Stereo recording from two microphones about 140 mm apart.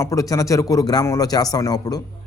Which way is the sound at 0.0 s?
25° left (ahead or behind).